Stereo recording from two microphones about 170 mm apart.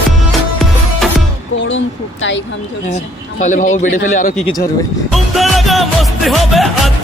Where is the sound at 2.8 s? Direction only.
45° left (ahead or behind).